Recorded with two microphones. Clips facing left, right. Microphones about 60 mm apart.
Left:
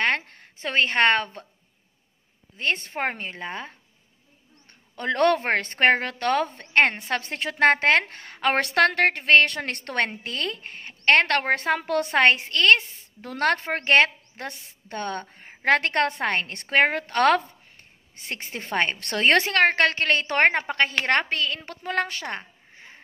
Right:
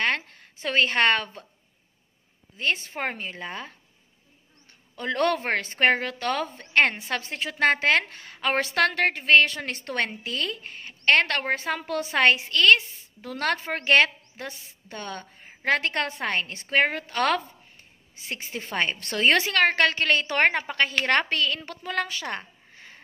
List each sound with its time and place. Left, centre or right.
0.0 s a sound: left
2.5 s a woman's voice: left
4.9 s a woman's voice: left
10.0 s a woman's voice: left
11.3 s a woman's voice: left
14.4 s a woman's voice: left
18.7 s a woman's voice: left
18.9 s a woman's voice: left
21.8 s a woman's voice: left